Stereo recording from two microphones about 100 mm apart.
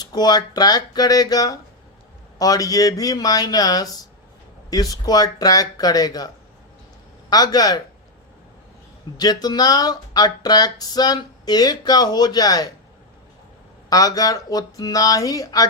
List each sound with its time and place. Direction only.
0.0 s speech: 45° left (ahead or behind)
9.1 s speech: 40° left (ahead or behind)
13.9 s speech: 40° left (ahead or behind)